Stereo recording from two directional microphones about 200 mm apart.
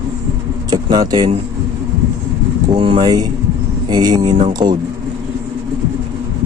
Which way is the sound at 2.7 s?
25° right (ahead or behind).